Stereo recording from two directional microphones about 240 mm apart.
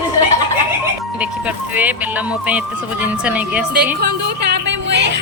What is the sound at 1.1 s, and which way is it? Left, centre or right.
A woman's voice, centre.